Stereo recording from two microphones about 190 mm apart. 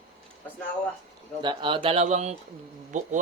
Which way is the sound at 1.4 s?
25° right (ahead or behind).